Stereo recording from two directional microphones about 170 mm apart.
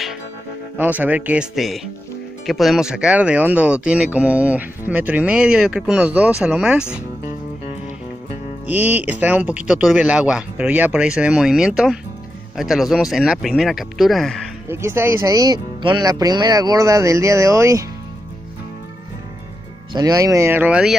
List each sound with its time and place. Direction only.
0.7 s speech: 10° right (ahead or behind)
8.6 s speech: 10° right (ahead or behind)
14.7 s speech: 15° right (ahead or behind)
19.9 s speech: 20° right (ahead or behind); by 20.9 s 5° right (ahead or behind)